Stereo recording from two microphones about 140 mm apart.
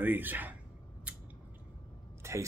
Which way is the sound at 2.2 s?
20° right (ahead or behind).